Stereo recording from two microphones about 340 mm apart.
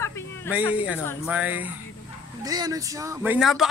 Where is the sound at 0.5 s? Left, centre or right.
Centre.